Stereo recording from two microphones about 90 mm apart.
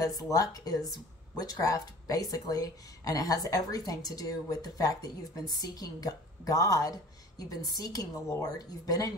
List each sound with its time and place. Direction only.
0.1 s a woman's voice: 40° left (ahead or behind)